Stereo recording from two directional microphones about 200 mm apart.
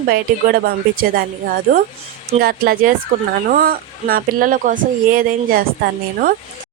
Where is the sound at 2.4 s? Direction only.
45° right (ahead or behind).